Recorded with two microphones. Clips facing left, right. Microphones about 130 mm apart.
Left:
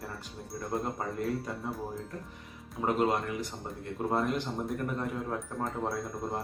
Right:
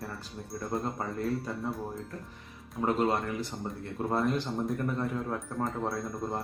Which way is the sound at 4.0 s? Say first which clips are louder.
Even; 15° left (ahead or behind).